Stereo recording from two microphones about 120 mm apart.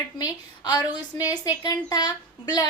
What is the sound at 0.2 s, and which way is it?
A woman's voice, 35° left (ahead or behind).